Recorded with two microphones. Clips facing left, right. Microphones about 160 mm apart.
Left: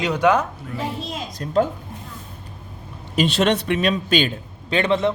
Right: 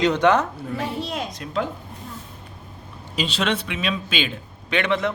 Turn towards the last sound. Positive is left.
turn(degrees=30)  # may be behind; listen again after turning